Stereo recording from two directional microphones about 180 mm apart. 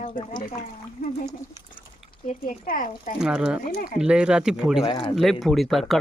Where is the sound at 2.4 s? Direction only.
50° left (ahead or behind).